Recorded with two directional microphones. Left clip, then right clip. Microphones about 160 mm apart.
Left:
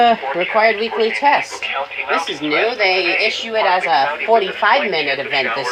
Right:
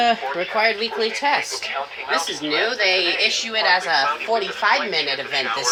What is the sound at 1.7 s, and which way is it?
Speech, 75° right (ahead or behind).